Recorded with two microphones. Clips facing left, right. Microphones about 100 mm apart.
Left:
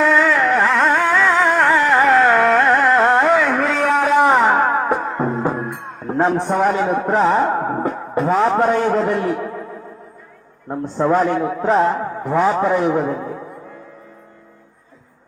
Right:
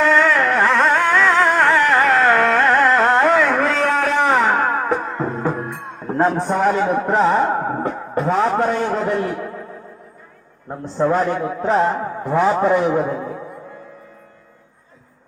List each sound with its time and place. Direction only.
0.0 s carnatic music: centre (ahead or behind)
3.7 s a sound: 15° left (ahead or behind)
4.3 s music: centre (ahead or behind); by 5.6 s 15° left (ahead or behind)
5.6 s music: centre (ahead or behind)
6.4 s a man's voice: 5° left (ahead or behind)
10.9 s a man's voice: centre (ahead or behind)